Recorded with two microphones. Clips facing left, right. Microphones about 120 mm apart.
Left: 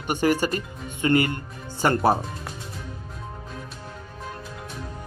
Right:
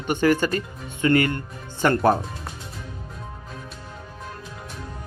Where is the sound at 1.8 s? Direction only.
10° left (ahead or behind).